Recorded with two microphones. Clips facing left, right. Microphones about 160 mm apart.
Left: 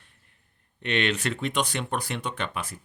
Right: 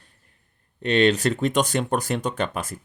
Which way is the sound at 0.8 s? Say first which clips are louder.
Right 8 dB; 35° right (ahead or behind).